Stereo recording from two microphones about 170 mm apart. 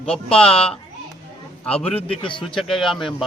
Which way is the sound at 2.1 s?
30° left (ahead or behind).